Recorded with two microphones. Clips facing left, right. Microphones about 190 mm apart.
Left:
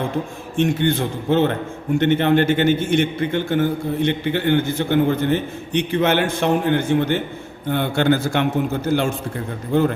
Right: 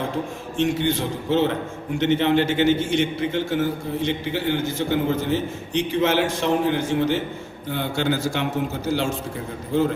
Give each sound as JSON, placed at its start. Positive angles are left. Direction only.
{"t": 0.5, "sound": "a man's voice", "side_deg": 55}